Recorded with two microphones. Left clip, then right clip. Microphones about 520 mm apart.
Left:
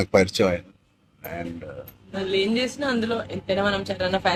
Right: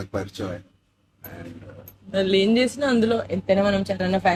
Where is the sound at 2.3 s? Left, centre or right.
Right.